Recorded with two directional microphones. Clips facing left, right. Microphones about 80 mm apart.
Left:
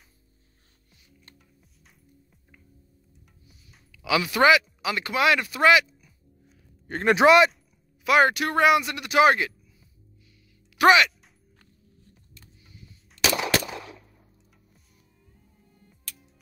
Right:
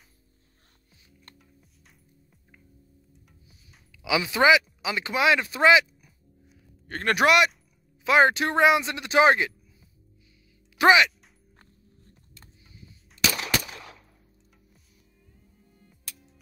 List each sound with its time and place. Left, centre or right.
1.6 s music: centre
3.9 s speech: centre
6.9 s speech: centre
7.2 s speech: left
8.0 s speech: right
12.4 s music: right